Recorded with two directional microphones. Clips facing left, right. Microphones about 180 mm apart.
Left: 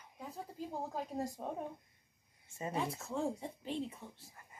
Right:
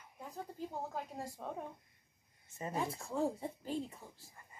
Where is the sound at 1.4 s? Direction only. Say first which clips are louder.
Left 2 dB; 20° left (ahead or behind).